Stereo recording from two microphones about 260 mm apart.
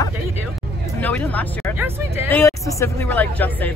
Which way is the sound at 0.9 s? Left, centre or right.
Centre.